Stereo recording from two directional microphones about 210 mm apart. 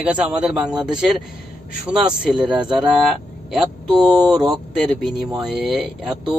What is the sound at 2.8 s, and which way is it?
Speech, 5° right (ahead or behind).